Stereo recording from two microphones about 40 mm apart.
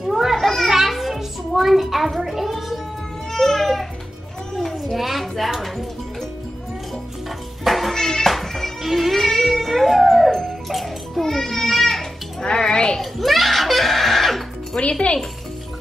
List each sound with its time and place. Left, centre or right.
0.0 s children playing: centre
0.4 s children playing: centre
0.7 s a sound: centre
3.3 s baby cry: centre
4.8 s a sound: centre
7.6 s music: centre
12.4 s a sound: centre
13.0 s music: centre
14.8 s speech: left